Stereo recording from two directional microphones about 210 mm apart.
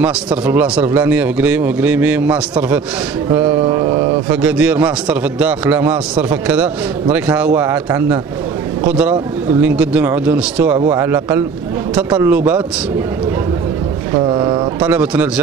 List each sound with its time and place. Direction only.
0.0 s a man's voice: 5° right (ahead or behind)
3.6 s mantra: 20° right (ahead or behind)
4.3 s a man's voice: 5° right (ahead or behind)
12.3 s a man's voice: 5° right (ahead or behind)
14.1 s speech: 20° right (ahead or behind)
14.8 s a man's voice: 5° right (ahead or behind)